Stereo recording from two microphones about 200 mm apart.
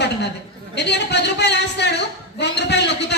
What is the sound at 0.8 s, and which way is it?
A woman's voice, 60° left (ahead or behind).